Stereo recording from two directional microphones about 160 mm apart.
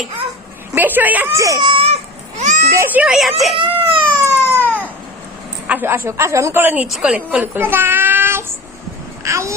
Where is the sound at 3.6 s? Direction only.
35° right (ahead or behind).